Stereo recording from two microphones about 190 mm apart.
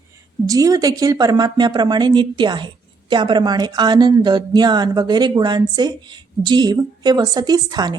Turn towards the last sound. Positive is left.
turn(degrees=-20)  # may be behind; listen again after turning